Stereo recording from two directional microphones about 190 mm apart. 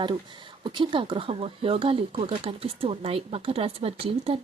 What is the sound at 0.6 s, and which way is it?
Speech, 25° right (ahead or behind).